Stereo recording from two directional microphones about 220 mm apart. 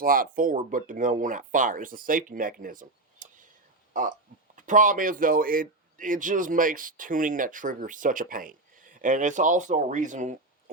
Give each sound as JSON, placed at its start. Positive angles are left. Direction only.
{"t": 0.0, "sound": "speech", "side_deg": -40}